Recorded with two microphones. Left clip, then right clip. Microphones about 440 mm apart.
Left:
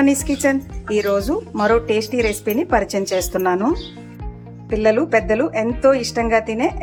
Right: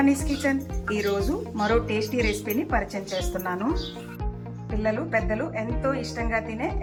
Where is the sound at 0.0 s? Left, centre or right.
Centre.